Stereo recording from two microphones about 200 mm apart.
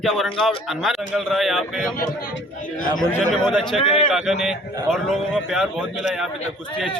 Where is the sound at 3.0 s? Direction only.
Centre (ahead or behind).